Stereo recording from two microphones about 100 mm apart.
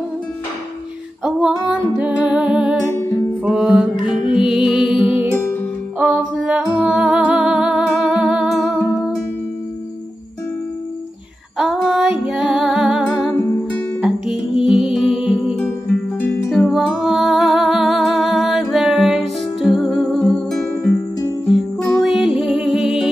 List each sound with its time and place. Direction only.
1.2 s music: 10° right (ahead or behind)
5.9 s music: 10° right (ahead or behind)
11.5 s music: centre (ahead or behind)
13.3 s music: 20° left (ahead or behind)
14.0 s music: 5° right (ahead or behind)
22.0 s music: centre (ahead or behind)